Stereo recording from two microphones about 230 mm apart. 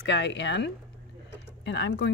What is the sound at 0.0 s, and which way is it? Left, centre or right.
Speech, left.